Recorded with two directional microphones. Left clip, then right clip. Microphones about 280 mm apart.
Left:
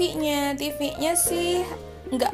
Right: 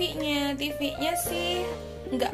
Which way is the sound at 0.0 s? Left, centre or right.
Left.